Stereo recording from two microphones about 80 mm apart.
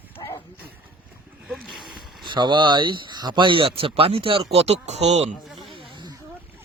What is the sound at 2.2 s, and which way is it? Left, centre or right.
Speech, right.